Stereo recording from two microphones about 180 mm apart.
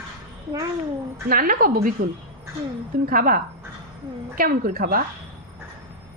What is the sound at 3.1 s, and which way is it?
A woman's voice, 50° right (ahead or behind).